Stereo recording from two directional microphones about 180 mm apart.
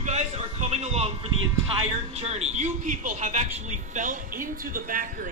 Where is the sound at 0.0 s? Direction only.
40° right (ahead or behind).